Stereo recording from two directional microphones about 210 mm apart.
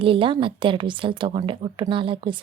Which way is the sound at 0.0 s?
25° right (ahead or behind).